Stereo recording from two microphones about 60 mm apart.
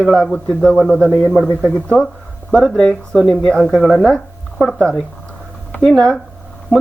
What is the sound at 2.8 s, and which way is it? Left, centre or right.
Speech, centre.